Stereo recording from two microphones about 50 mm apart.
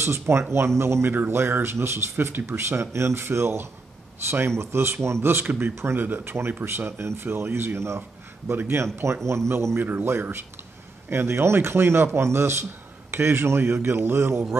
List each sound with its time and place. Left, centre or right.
0.0 s speech: right
1.1 s speech: right
6.0 s speech: right
6.3 s a man's voice: right
9.8 s speech: right